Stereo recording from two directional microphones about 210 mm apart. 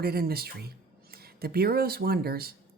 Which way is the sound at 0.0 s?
45° right (ahead or behind).